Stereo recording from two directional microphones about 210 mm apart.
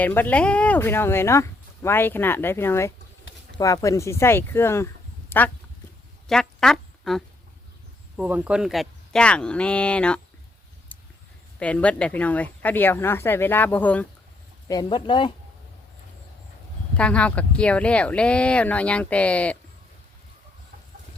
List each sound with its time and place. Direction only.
0.0 s speech: 10° left (ahead or behind)
6.2 s quack: centre (ahead or behind)
8.1 s speech: 5° right (ahead or behind)
11.6 s speech: 5° left (ahead or behind)
14.7 s speech: 20° left (ahead or behind)
17.0 s speech: 5° left (ahead or behind)